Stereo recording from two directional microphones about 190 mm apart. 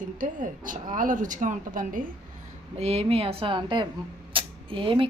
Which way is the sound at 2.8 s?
30° right (ahead or behind).